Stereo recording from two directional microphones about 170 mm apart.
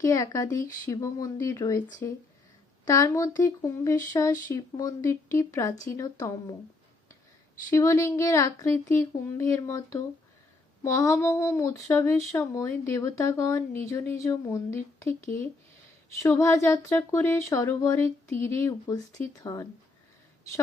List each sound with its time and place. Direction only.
0.0 s speech: 20° left (ahead or behind)
7.7 s speech: 15° left (ahead or behind)